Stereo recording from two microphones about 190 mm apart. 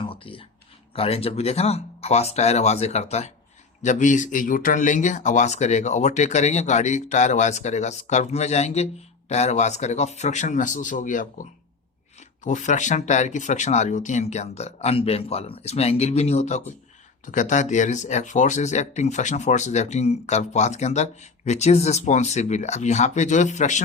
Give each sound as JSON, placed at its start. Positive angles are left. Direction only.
{"t": 0.0, "sound": "a sound", "side_deg": 30}
{"t": 0.9, "sound": "speech", "side_deg": 30}
{"t": 12.5, "sound": "speech", "side_deg": 40}